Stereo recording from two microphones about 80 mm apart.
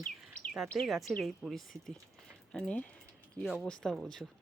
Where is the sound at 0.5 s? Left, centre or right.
Centre.